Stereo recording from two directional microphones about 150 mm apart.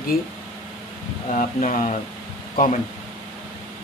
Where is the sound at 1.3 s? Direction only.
55° left (ahead or behind).